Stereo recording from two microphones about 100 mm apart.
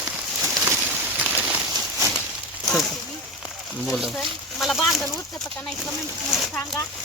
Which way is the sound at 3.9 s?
Centre (ahead or behind).